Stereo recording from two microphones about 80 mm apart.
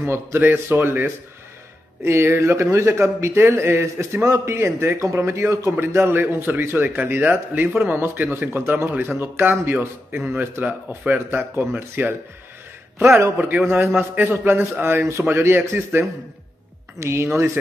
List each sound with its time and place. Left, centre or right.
0.0 s a man's voice: right
5.8 s a man's voice: right